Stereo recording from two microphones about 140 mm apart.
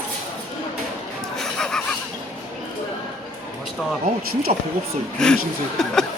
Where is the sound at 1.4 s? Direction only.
5° left (ahead or behind).